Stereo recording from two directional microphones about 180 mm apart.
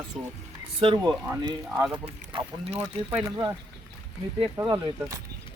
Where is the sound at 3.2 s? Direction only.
20° right (ahead or behind).